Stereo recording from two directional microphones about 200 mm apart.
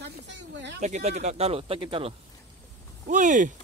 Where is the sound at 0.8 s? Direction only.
35° right (ahead or behind).